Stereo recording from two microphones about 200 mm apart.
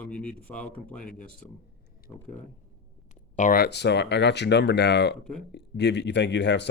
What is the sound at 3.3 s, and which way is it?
Speech, 45° left (ahead or behind).